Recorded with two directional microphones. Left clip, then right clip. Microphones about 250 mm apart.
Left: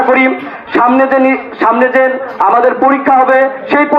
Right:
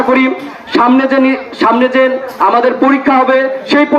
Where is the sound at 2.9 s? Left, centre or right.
Right.